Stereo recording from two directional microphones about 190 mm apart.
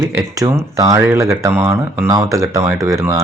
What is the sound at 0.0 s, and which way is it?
Speech, 15° right (ahead or behind).